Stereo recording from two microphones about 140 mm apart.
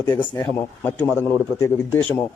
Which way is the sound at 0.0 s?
15° left (ahead or behind).